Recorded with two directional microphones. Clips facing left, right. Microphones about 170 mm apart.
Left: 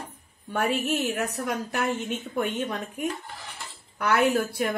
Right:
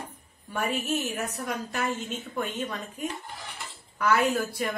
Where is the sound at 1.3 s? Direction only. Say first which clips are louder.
Left 3 dB; 65° left (ahead or behind).